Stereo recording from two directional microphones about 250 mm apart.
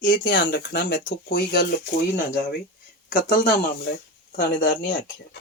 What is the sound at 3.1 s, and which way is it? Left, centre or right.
Speech, left.